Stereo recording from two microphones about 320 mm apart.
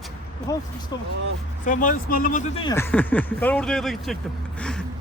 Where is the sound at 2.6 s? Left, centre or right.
Centre.